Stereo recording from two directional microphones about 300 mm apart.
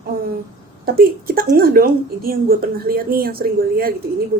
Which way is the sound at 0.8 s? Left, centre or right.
Right.